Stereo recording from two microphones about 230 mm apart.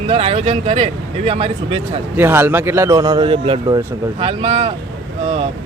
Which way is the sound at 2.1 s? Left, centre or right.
Centre.